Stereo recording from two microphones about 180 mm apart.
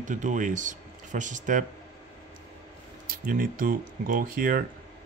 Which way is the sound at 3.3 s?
50° right (ahead or behind).